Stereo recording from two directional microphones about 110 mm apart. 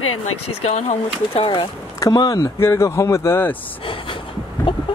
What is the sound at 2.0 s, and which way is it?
Speech, 35° left (ahead or behind).